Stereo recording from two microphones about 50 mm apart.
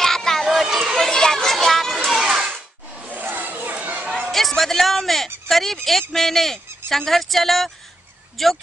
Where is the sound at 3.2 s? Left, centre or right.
Right.